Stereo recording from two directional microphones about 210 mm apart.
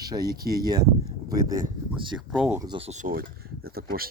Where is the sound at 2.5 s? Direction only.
20° right (ahead or behind); by 4.0 s 45° right (ahead or behind).